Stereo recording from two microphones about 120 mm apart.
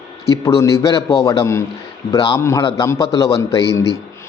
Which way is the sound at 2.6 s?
35° left (ahead or behind).